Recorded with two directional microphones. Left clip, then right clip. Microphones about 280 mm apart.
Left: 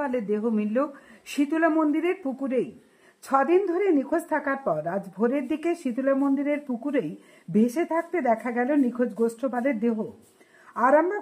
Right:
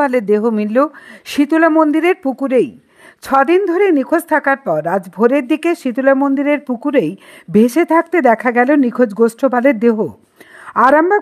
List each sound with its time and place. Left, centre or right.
0.0 s a woman's voice: right